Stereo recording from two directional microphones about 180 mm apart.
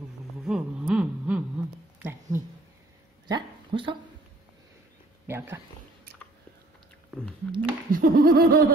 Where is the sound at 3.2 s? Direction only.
25° right (ahead or behind).